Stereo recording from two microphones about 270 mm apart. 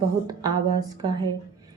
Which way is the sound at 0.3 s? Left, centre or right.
Centre.